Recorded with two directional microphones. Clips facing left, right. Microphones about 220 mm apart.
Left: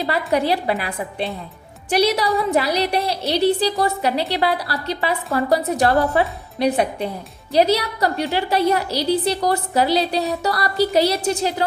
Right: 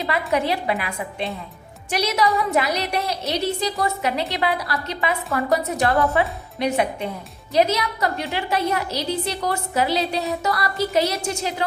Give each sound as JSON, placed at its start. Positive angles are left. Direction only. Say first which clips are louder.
{"t": 0.0, "sound": "a woman's voice", "louder": "left 2 dB", "side_deg": 35}